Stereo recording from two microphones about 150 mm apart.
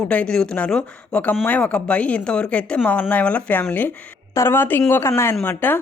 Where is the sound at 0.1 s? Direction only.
5° left (ahead or behind).